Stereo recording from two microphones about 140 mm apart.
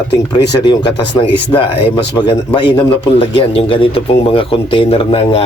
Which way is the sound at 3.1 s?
40° left (ahead or behind).